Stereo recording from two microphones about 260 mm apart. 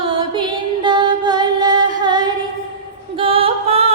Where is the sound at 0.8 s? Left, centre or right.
Centre.